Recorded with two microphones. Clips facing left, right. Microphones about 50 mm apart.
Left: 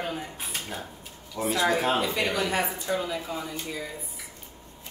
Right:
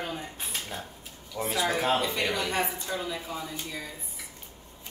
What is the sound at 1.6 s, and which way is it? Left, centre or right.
Speech, centre.